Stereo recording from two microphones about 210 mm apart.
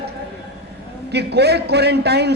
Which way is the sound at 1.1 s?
50° right (ahead or behind).